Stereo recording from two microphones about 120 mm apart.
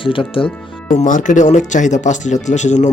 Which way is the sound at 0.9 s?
90° left.